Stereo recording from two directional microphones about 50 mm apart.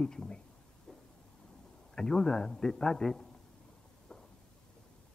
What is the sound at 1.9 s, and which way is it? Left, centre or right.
A man's voice, centre.